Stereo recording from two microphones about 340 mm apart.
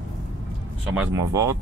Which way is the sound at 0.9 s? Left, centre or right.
Centre.